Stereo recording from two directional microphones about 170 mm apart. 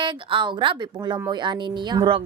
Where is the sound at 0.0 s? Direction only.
30° right (ahead or behind).